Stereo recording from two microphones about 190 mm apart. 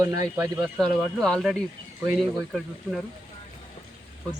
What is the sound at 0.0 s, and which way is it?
Speech, 15° right (ahead or behind).